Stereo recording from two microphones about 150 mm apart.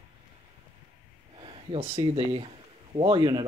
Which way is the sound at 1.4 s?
40° right (ahead or behind).